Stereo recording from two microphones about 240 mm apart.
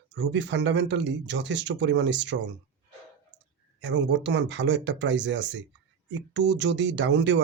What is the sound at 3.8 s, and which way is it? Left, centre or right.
A man's voice, right.